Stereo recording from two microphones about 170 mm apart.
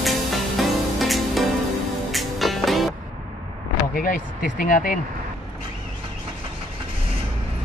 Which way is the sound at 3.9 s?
55° left (ahead or behind).